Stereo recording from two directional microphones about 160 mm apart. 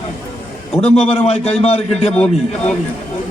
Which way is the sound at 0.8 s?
40° left (ahead or behind).